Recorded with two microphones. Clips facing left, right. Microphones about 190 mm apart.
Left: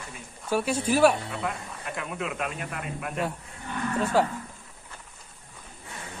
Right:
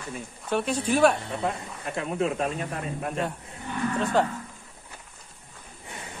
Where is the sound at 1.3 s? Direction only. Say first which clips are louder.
Right 3 dB; 30° right (ahead or behind).